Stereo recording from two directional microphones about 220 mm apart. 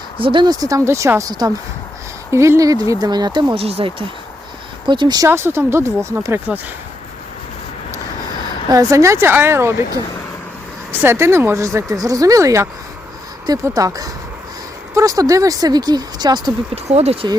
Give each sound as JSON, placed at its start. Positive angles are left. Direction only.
{"t": 0.2, "sound": "speech", "side_deg": -20}
{"t": 8.7, "sound": "speech", "side_deg": -15}